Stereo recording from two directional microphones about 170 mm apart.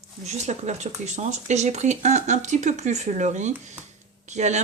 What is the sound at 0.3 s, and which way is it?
Speech, 40° right (ahead or behind).